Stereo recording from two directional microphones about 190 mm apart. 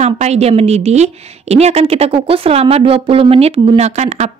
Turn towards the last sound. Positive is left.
turn(degrees=-35)  # may be behind; listen again after turning